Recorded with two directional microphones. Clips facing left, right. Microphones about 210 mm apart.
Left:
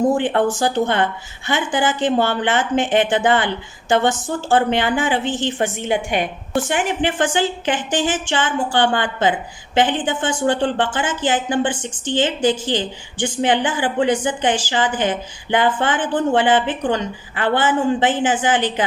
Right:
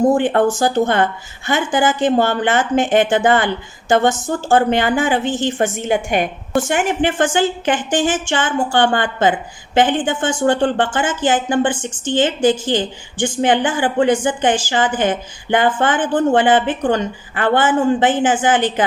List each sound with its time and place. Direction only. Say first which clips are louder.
0.1 s speech: right 3 dB; 45° right (ahead or behind)